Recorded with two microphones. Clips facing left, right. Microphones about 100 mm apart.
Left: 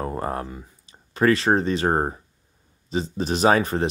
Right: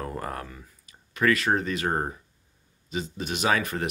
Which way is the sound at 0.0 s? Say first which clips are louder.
Left 6 dB; 25° left (ahead or behind).